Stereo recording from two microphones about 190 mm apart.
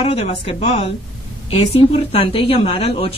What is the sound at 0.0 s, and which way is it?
A woman's voice, 35° left (ahead or behind).